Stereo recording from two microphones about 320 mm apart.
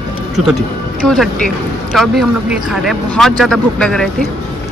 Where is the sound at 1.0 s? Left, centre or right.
Centre.